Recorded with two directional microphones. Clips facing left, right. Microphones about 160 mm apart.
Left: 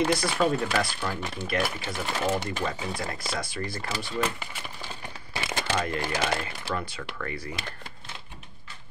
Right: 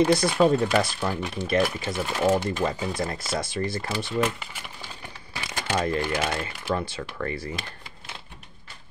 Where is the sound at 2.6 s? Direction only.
35° right (ahead or behind).